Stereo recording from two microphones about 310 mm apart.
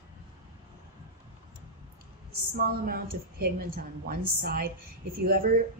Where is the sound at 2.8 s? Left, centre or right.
Right.